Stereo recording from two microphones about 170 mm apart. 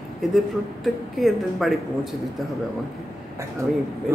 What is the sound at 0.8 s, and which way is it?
Speech, centre (ahead or behind).